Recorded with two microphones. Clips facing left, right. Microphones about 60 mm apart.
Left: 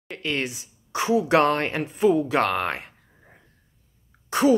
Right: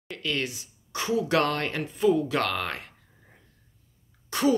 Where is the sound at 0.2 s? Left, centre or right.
Left.